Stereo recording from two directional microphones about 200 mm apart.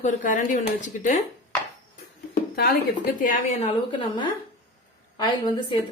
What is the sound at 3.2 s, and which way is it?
Speech, 40° left (ahead or behind).